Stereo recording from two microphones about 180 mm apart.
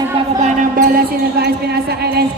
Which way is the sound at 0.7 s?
55° right (ahead or behind).